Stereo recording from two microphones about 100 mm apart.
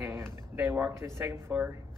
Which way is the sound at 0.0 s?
20° right (ahead or behind).